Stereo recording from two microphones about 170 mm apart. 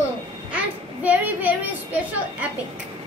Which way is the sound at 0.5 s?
10° right (ahead or behind).